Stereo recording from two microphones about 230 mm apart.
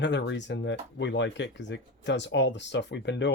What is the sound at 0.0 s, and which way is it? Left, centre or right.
Speech, left.